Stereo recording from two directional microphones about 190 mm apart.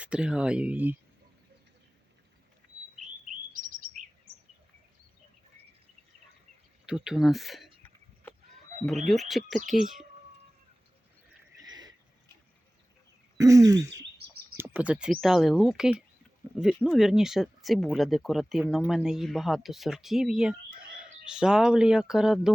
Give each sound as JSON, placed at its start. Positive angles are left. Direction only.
{"t": 0.0, "sound": "speech", "side_deg": -5}
{"t": 3.3, "sound": "chirp", "side_deg": -40}
{"t": 6.8, "sound": "speech", "side_deg": -5}
{"t": 9.0, "sound": "speech", "side_deg": 0}
{"t": 11.6, "sound": "a sound", "side_deg": -20}
{"t": 13.3, "sound": "speech", "side_deg": -15}